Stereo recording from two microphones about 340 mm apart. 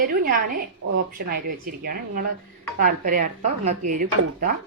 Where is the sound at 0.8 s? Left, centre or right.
Right.